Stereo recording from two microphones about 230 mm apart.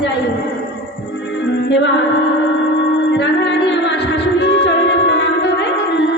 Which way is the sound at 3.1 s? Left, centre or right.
Left.